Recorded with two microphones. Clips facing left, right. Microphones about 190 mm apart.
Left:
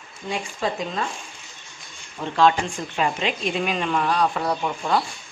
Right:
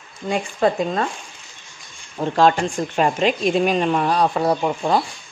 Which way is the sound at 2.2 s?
45° right (ahead or behind).